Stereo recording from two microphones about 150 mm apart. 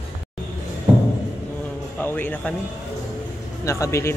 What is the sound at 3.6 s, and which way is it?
Speech, 20° left (ahead or behind).